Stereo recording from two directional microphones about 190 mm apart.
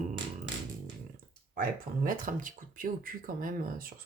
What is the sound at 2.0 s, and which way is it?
Speech, 45° right (ahead or behind).